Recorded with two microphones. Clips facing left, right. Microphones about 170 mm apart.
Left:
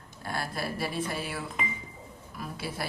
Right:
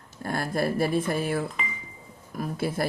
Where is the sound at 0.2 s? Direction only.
50° right (ahead or behind).